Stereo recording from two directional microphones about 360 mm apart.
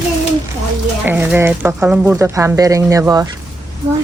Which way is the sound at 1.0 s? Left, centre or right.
Centre.